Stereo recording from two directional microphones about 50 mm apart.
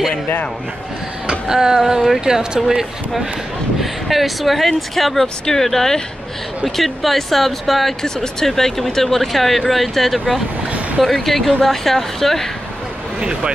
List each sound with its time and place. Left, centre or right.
1.2 s speech: centre
13.2 s speech: centre